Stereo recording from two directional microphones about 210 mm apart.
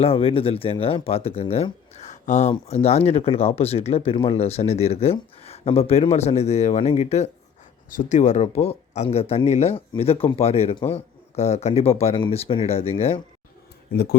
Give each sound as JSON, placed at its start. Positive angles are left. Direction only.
{"t": 0.0, "sound": "speech", "side_deg": 25}
{"t": 13.9, "sound": "speech", "side_deg": 50}